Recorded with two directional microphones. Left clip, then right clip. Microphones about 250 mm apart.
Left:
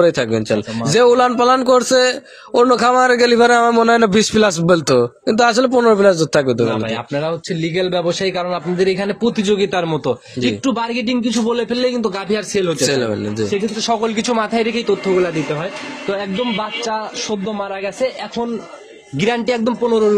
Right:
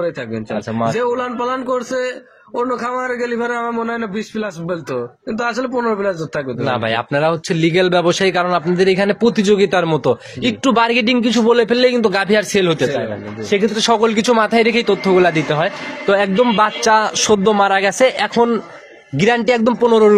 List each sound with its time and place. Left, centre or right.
0.9 s a man's voice: left
6.9 s a man's voice: right
10.6 s a man's voice: right
19.1 s a man's voice: centre
19.9 s a man's voice: right